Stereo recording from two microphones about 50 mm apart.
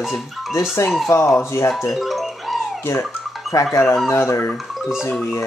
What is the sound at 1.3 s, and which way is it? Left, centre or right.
Speech, left.